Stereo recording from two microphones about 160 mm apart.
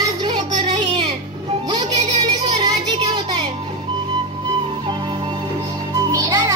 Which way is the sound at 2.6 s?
30° right (ahead or behind).